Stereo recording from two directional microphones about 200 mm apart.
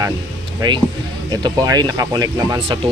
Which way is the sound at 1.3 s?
20° right (ahead or behind).